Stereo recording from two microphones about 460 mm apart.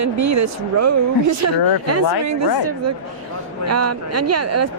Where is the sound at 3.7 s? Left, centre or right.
Right.